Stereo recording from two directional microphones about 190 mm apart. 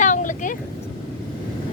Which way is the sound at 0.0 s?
40° left (ahead or behind).